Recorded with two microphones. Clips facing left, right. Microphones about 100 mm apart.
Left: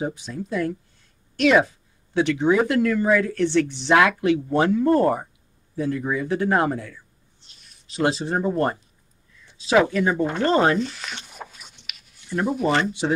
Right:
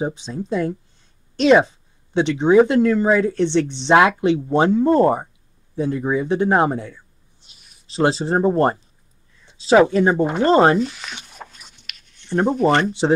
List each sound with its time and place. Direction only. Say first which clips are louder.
0.0 s speech: right 3 dB; 25° right (ahead or behind)
7.3 s a sound: right 1 dB; 10° right (ahead or behind)
7.8 s speech: right 4 dB; 30° right (ahead or behind)
10.8 s speech: right 4 dB; centre (ahead or behind)
11.2 s a sound: even; 5° left (ahead or behind)
11.8 s writing: right 1 dB; 5° left (ahead or behind)
12.3 s speech: right 5 dB; 30° right (ahead or behind)
12.5 s speech: right 4 dB; centre (ahead or behind)